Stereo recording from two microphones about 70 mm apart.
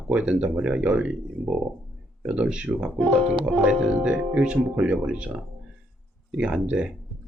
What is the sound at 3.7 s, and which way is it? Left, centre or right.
Speech, centre.